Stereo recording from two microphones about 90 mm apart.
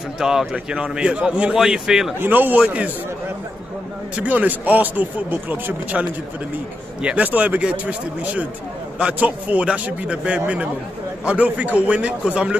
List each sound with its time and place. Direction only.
0.2 s a man's voice: 5° right (ahead or behind)
2.1 s speech: 20° right (ahead or behind)
4.2 s speech: 20° right (ahead or behind)